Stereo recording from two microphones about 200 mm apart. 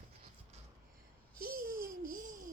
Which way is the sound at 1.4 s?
45° right (ahead or behind).